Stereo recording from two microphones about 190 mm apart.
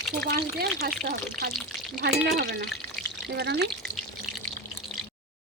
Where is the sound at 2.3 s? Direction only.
55° right (ahead or behind).